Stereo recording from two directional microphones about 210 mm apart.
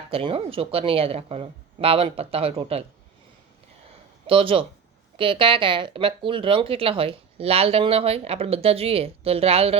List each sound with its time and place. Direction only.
0.1 s speech: 25° right (ahead or behind)
4.3 s speech: 25° right (ahead or behind)